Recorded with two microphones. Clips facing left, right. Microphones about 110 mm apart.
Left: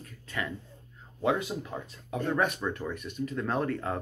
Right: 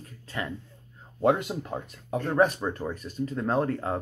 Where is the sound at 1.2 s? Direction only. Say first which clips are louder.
Right 4 dB; 50° right (ahead or behind).